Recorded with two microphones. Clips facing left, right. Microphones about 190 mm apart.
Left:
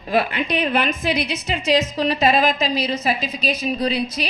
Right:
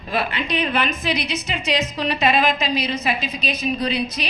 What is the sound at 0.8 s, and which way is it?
A woman's voice, 55° left (ahead or behind).